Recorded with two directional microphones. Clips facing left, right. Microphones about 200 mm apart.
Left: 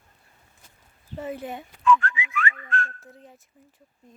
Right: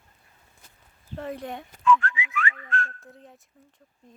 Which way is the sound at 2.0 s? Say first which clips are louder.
Left 1 dB; 50° left (ahead or behind).